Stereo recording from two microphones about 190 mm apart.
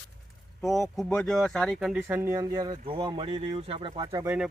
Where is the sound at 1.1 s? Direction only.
5° left (ahead or behind); by 4.3 s 20° right (ahead or behind).